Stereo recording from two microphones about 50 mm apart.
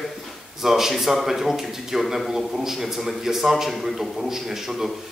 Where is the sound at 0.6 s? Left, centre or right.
Centre.